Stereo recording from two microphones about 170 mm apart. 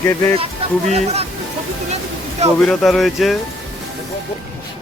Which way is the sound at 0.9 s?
40° right (ahead or behind).